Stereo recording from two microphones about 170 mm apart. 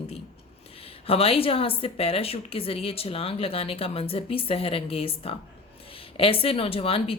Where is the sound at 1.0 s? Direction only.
35° left (ahead or behind).